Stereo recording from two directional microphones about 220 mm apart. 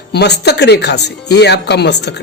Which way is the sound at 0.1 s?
50° left (ahead or behind).